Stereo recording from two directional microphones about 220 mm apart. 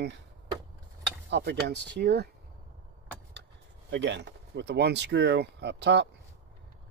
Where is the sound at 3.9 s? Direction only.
55° right (ahead or behind).